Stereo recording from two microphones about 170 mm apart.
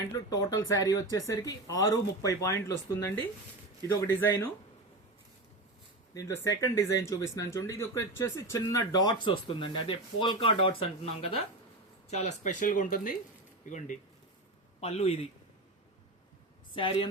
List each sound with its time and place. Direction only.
0.1 s speech: 20° left (ahead or behind)
6.1 s speech: 20° left (ahead or behind); by 15.3 s 35° left (ahead or behind)
16.7 s speech: 30° left (ahead or behind)